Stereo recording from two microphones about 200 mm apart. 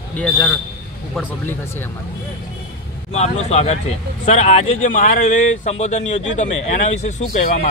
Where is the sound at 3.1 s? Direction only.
35° left (ahead or behind).